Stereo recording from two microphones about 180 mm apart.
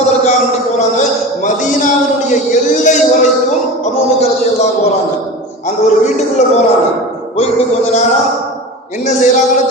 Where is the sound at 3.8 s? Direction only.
40° left (ahead or behind).